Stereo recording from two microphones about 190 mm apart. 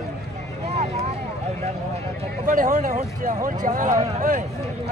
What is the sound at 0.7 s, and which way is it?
Vehicle, 35° right (ahead or behind).